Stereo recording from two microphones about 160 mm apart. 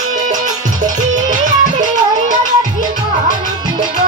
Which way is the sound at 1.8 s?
55° right (ahead or behind).